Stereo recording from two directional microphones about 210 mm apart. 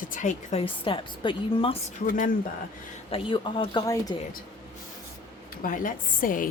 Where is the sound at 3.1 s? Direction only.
25° left (ahead or behind).